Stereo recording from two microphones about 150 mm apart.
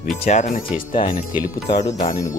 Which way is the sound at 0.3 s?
50° left (ahead or behind).